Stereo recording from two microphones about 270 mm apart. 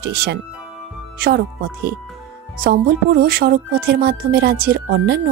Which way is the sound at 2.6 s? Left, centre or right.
Right.